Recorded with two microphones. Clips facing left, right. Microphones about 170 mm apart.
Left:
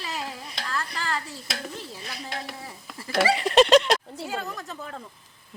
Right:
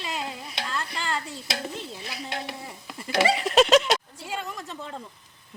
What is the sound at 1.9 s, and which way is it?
Stir, centre (ahead or behind).